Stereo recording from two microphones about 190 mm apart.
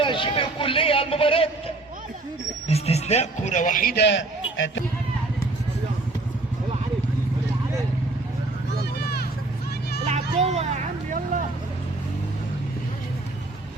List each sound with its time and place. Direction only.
0.0 s a man's voice: 25° left (ahead or behind); by 4.8 s 75° left (ahead or behind)
8.8 s a sound: 55° left (ahead or behind)
10.1 s vehicle: 35° right (ahead or behind)